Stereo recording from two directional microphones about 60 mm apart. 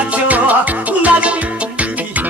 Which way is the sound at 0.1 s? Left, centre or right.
Right.